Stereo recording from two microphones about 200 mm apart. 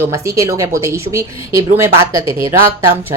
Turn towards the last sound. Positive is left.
turn(degrees=-10)  # may be behind; listen again after turning